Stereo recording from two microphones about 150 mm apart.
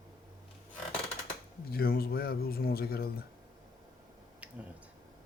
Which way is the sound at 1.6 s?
85° left.